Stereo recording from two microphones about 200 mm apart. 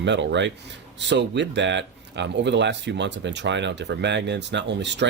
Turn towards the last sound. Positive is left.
turn(degrees=-60)  # may be behind; listen again after turning